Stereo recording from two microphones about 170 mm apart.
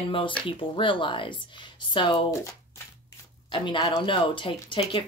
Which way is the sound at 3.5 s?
30° left (ahead or behind).